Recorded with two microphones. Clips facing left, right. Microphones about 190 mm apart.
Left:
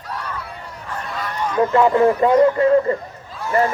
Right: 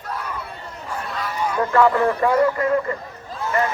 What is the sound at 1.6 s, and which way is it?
Speech, 20° left (ahead or behind).